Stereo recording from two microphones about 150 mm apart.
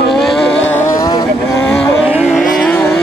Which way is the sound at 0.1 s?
Centre (ahead or behind).